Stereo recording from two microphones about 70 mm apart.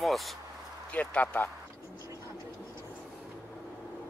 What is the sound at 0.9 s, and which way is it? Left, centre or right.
Speech, left.